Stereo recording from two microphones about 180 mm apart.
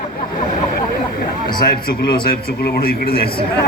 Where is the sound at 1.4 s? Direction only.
55° left (ahead or behind).